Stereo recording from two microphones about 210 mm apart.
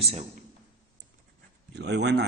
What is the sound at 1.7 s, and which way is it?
Speech, 55° right (ahead or behind).